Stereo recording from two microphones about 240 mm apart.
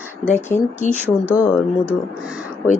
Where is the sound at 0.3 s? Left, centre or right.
Centre.